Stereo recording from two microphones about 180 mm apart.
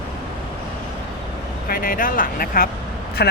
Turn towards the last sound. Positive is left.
turn(degrees=65)  # may be behind; listen again after turning